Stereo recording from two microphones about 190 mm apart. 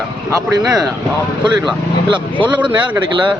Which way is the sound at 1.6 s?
25° right (ahead or behind).